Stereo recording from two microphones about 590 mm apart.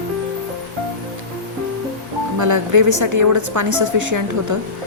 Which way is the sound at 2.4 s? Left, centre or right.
Right.